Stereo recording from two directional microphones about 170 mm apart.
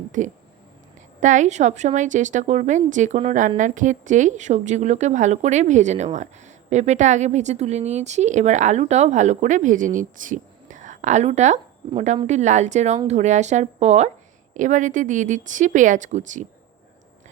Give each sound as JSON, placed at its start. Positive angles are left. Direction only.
{"t": 0.2, "sound": "speech", "side_deg": -50}